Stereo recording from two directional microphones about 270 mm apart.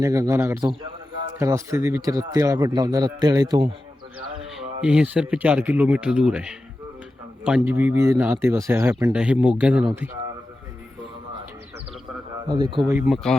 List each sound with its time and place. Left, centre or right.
0.0 s speech: centre
4.5 s speech: centre
12.5 s speech: centre
13.0 s speech: centre